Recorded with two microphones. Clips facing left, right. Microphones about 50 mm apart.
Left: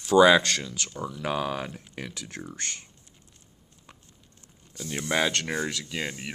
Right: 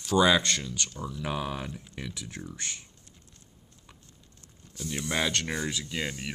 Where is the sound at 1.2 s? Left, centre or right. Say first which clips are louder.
Left 4 dB; left.